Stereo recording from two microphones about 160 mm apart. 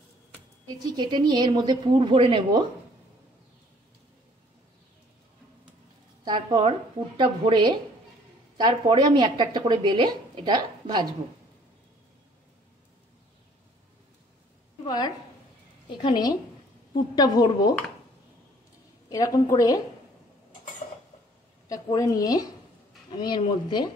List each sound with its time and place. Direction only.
0.7 s speech: 25° right (ahead or behind)
6.2 s speech: 30° right (ahead or behind)
14.9 s a woman's voice: 25° left (ahead or behind)
19.0 s a woman's voice: 20° left (ahead or behind)
21.6 s a woman's voice: 20° left (ahead or behind)